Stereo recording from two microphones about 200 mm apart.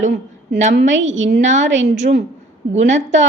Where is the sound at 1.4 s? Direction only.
35° right (ahead or behind).